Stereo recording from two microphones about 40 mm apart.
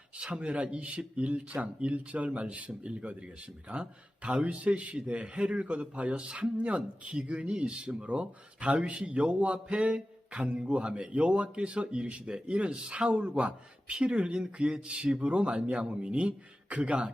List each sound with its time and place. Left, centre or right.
0.2 s a man's voice: right